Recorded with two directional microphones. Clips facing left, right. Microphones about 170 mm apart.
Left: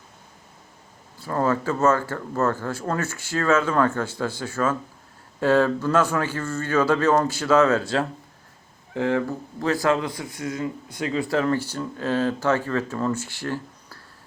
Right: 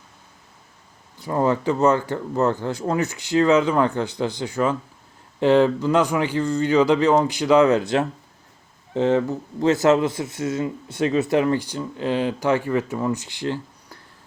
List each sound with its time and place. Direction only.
1.2 s speech: 15° right (ahead or behind)